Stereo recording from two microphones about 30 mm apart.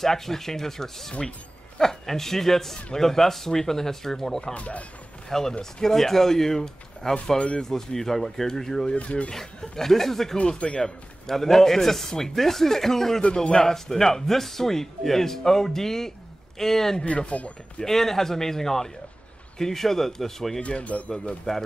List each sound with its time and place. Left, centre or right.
0.0 s a man's voice: centre
4.6 s speech: left
5.6 s a man's voice: centre
7.3 s speech: left
7.7 s a man's voice: centre
8.9 s speech: left
9.3 s a man's voice: centre
13.3 s a man's voice: left
13.6 s a man's voice: centre
17.3 s speech: left
17.8 s a man's voice: centre
20.6 s speech: left